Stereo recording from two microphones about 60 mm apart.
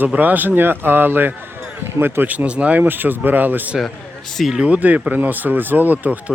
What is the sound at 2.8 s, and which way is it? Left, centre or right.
Speech, right.